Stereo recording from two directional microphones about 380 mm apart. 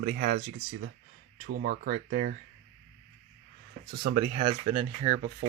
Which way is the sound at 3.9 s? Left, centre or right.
Right.